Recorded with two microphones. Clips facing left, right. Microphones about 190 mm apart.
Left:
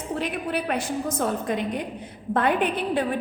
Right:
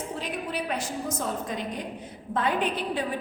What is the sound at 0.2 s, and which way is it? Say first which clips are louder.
A woman's voice: left 5 dB; 60° left (ahead or behind).